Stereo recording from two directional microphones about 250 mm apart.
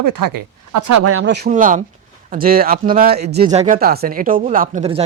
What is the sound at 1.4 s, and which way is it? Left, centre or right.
Speech, right.